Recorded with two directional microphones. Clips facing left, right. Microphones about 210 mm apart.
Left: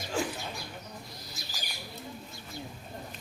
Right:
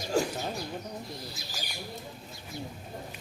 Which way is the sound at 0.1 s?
40° right (ahead or behind).